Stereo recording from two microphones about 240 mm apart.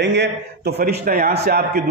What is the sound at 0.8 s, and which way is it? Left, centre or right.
A man's voice, right.